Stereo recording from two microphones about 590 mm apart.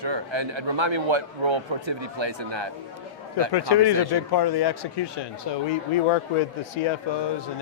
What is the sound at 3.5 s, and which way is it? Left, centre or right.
Speech, left.